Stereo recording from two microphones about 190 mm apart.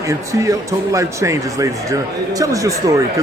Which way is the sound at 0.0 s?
15° right (ahead or behind).